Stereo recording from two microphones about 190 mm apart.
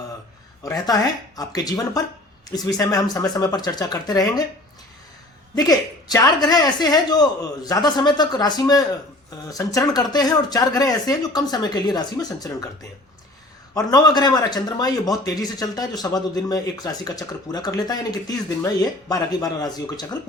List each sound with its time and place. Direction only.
0.6 s a man's voice: 15° left (ahead or behind)
5.5 s a man's voice: 20° left (ahead or behind)
13.7 s a man's voice: 20° left (ahead or behind)